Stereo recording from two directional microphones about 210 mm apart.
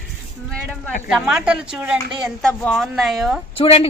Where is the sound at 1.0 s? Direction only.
5° right (ahead or behind).